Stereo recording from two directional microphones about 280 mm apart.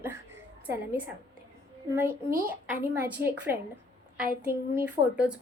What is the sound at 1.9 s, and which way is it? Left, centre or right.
A woman's voice, centre.